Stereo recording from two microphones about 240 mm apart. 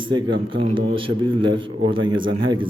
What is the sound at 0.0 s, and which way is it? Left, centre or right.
A man's voice, centre.